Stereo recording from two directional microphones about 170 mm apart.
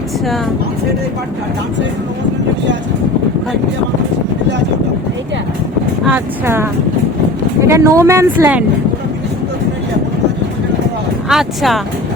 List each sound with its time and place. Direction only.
6.1 s speech: 10° right (ahead or behind)
7.7 s speech: 15° right (ahead or behind)
11.3 s speech: centre (ahead or behind)